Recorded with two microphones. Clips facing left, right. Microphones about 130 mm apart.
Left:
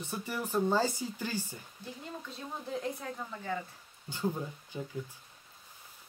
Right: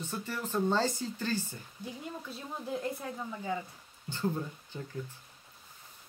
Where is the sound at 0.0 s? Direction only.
15° left (ahead or behind).